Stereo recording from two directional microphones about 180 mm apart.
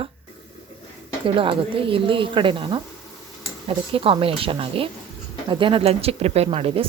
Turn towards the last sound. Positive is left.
turn(degrees=-30)  # may be behind; listen again after turning